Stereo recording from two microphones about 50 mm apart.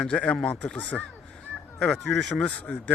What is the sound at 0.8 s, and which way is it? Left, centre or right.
Speech, left.